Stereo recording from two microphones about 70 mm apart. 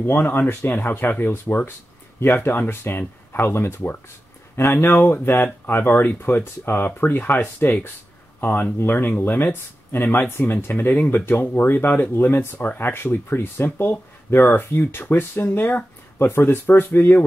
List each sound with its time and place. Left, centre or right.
0.0 s speech: left